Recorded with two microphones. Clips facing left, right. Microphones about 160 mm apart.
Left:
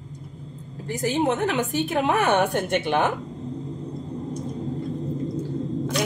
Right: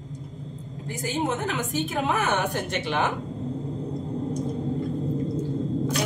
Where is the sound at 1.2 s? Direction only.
65° left (ahead or behind).